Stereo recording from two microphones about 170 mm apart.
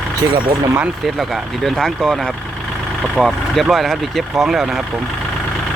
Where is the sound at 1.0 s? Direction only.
Centre (ahead or behind).